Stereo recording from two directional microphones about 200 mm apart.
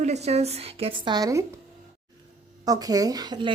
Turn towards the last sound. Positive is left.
turn(degrees=-20)  # may be behind; listen again after turning